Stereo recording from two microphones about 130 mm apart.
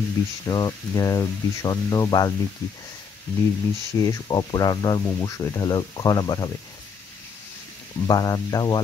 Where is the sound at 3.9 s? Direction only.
30° left (ahead or behind).